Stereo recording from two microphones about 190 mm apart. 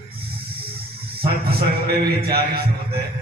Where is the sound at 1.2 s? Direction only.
55° right (ahead or behind).